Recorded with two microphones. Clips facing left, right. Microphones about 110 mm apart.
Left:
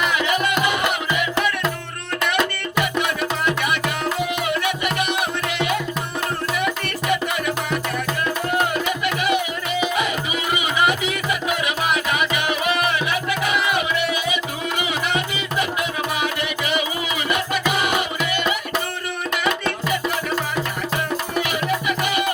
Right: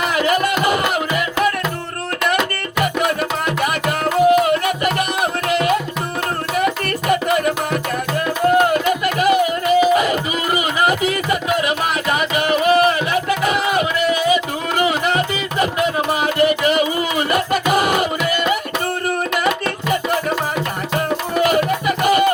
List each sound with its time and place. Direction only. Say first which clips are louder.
0.0 s music: right 4 dB; 45° right (ahead or behind)
2.8 s music: right 6 dB; 45° right (ahead or behind)
7.1 s music: right 6 dB; 45° right (ahead or behind)
21.3 s music: right 8 dB; 45° right (ahead or behind)